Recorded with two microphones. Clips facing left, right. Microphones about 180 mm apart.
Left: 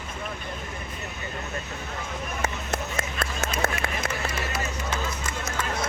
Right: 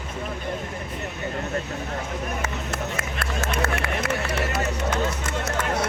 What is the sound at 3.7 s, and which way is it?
Run, 70° right (ahead or behind).